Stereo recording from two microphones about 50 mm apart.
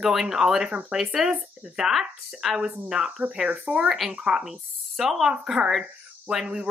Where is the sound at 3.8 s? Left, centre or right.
Centre.